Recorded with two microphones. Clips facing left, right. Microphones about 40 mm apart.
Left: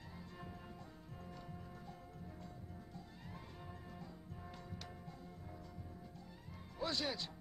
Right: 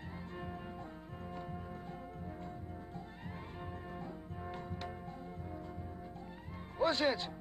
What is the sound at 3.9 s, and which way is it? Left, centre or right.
Music, right.